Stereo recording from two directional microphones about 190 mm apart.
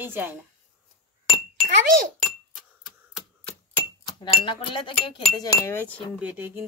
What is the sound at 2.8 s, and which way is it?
Typewriter, centre (ahead or behind).